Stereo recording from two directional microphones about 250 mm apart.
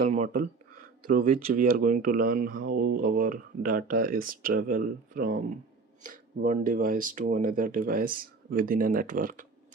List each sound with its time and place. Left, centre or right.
0.0 s speech: right
2.7 s speech: right
3.0 s speech: right